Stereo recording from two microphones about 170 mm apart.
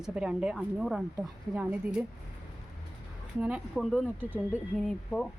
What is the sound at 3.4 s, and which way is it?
A woman's voice, 5° right (ahead or behind).